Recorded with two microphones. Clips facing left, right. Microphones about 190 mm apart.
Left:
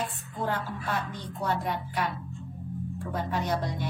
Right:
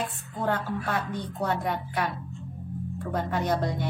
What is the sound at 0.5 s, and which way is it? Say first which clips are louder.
A woman's voice: right 4 dB; 60° right (ahead or behind).